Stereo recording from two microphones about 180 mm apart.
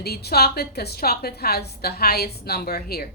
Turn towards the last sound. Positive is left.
turn(degrees=60)  # may be behind; listen again after turning